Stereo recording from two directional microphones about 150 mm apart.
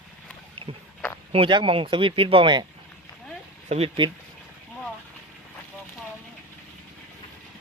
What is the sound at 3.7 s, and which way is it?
Speech, 45° right (ahead or behind).